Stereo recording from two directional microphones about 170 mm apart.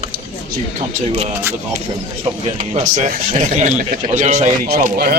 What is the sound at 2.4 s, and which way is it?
Speech, 45° right (ahead or behind).